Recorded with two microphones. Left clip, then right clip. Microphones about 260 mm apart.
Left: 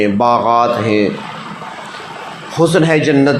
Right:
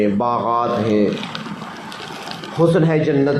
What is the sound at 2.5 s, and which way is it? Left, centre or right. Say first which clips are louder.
Speech: left 4 dB; left.